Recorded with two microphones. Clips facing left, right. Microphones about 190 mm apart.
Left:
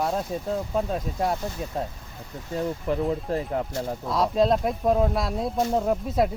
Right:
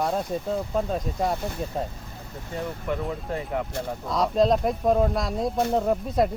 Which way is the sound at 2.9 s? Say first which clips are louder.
Left 3 dB; 35° left (ahead or behind).